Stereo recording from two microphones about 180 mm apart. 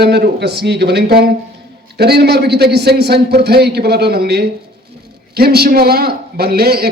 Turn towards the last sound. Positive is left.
turn(degrees=-60)  # may be behind; listen again after turning